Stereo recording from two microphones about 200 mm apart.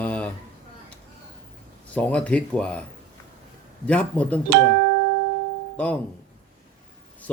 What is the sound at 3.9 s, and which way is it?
Speech, 5° left (ahead or behind).